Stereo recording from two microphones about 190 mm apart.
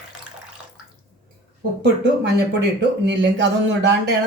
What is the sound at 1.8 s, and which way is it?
Speech, 65° right (ahead or behind).